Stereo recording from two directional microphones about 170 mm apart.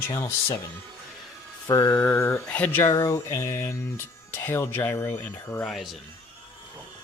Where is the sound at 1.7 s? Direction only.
20° left (ahead or behind); by 5.9 s centre (ahead or behind).